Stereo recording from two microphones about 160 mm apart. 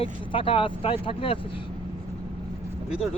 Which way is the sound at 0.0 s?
35° left (ahead or behind).